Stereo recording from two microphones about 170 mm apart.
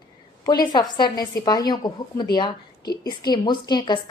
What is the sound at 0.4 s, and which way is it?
A woman's voice, 25° left (ahead or behind).